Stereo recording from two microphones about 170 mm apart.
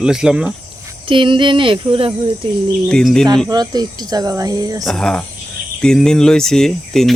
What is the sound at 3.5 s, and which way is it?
Speech, 25° right (ahead or behind).